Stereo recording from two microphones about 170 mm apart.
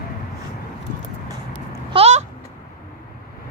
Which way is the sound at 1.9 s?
40° right (ahead or behind).